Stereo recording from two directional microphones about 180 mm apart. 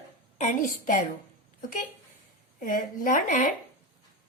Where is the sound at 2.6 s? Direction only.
50° left (ahead or behind).